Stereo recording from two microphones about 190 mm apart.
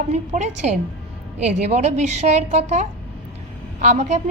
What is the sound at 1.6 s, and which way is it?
A woman's voice, 35° right (ahead or behind).